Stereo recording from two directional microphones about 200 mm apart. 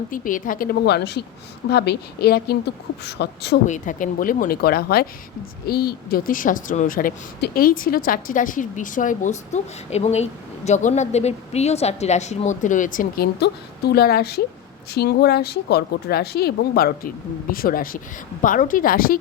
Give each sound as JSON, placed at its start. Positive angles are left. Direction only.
{"t": 0.1, "sound": "a woman's voice", "side_deg": 40}
{"t": 3.7, "sound": "a woman's voice", "side_deg": 40}